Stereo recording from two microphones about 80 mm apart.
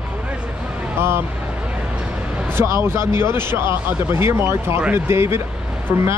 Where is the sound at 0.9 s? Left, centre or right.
Right.